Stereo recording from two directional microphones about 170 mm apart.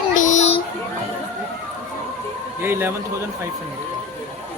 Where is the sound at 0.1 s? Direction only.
45° left (ahead or behind).